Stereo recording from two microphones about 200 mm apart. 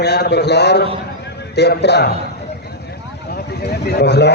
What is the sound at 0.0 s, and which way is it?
A man's voice, 55° left (ahead or behind).